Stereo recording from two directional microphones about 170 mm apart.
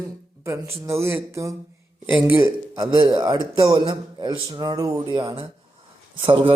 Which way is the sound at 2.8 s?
25° right (ahead or behind).